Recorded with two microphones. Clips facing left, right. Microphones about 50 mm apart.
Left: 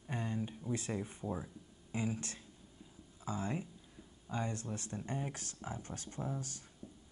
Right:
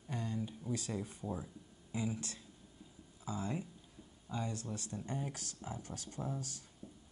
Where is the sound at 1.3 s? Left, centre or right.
Left.